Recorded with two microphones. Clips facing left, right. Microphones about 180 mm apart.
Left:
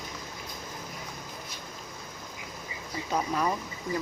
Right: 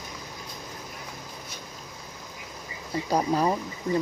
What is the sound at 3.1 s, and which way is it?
Speech, 35° right (ahead or behind).